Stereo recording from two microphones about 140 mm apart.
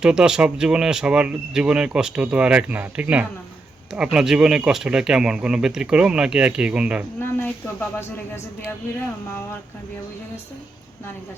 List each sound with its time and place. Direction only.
0.0 s speech: 5° right (ahead or behind)
7.2 s speech: 15° left (ahead or behind)